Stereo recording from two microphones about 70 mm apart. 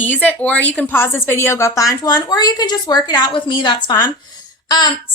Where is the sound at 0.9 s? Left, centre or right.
Left.